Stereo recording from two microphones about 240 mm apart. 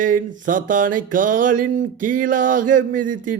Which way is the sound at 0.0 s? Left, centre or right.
Right.